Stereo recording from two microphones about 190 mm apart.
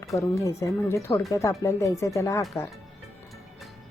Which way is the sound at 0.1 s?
15° left (ahead or behind).